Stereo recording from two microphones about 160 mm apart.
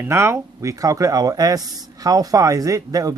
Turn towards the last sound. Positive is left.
turn(degrees=-20)  # may be behind; listen again after turning